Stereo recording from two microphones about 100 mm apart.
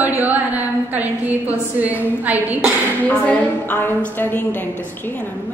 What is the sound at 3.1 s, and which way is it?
A woman's voice, 15° left (ahead or behind).